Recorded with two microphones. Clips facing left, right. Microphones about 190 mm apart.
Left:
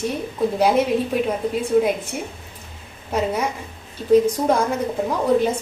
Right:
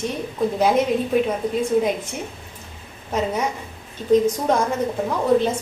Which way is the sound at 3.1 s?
5° left (ahead or behind).